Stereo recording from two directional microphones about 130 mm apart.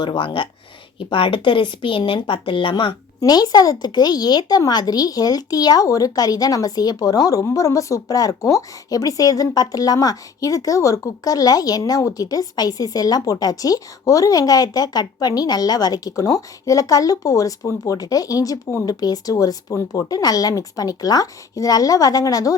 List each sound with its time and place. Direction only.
0.0 s a woman's voice: 40° left (ahead or behind)